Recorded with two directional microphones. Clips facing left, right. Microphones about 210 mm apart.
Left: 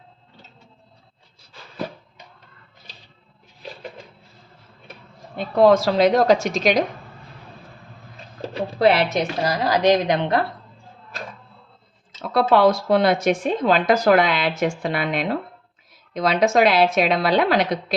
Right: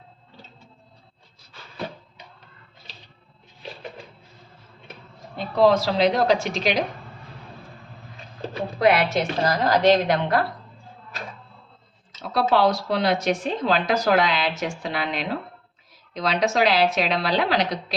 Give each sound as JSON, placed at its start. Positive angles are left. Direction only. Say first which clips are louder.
{"t": 5.5, "sound": "speech", "louder": "left 3 dB", "side_deg": 50}
{"t": 8.5, "sound": "a woman's voice", "louder": "left 2 dB", "side_deg": 30}
{"t": 12.3, "sound": "speech", "louder": "left 4 dB", "side_deg": 55}